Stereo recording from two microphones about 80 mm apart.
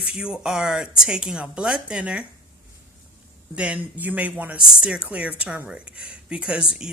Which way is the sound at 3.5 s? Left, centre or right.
Centre.